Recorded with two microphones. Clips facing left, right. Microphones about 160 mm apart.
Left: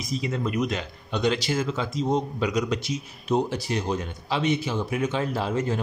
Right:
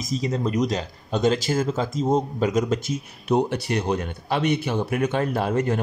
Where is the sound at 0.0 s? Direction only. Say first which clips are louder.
Right 3 dB; 40° right (ahead or behind).